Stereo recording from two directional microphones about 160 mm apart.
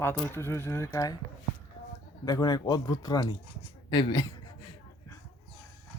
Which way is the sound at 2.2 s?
25° left (ahead or behind).